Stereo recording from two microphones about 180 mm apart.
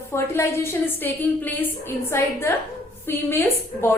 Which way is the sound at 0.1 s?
15° left (ahead or behind).